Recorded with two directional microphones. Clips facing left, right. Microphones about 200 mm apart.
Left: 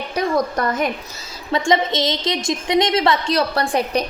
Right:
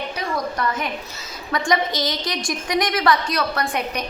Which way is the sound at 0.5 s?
40° left (ahead or behind).